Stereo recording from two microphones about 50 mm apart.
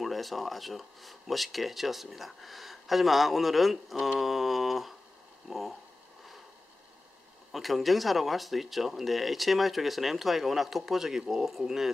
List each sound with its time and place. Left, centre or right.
0.0 s speech: centre
7.5 s speech: centre